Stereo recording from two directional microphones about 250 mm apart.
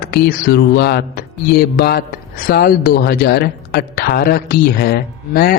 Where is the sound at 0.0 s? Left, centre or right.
Left.